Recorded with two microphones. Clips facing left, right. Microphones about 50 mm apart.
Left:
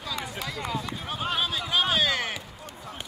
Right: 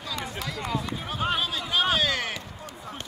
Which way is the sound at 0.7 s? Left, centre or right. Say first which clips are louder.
Right 1 dB; centre.